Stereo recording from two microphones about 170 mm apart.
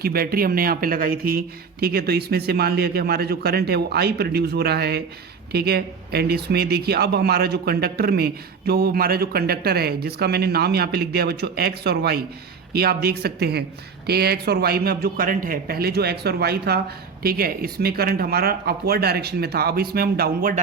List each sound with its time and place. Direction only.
0.0 s speech: 65° right (ahead or behind)